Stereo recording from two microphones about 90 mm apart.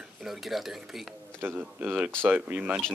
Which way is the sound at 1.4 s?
20° right (ahead or behind).